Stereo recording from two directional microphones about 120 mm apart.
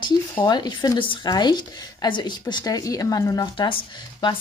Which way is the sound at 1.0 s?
45° left (ahead or behind).